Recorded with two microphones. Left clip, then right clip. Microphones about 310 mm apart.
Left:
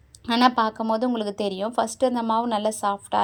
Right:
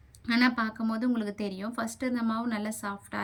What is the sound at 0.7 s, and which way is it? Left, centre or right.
A woman's voice, centre.